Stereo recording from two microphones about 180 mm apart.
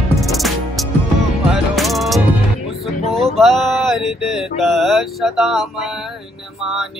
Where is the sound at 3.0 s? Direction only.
35° right (ahead or behind).